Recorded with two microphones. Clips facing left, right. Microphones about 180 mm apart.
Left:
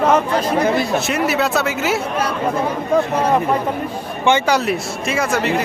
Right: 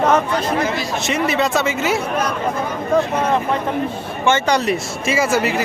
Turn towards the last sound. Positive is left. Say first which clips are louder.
# right 1 dB
turn(degrees=-5)  # may be behind; listen again after turning